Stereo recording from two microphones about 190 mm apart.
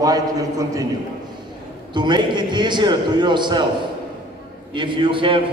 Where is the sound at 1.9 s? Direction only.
25° right (ahead or behind).